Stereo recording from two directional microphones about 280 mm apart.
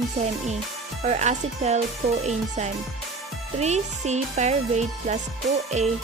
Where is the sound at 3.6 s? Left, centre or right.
Right.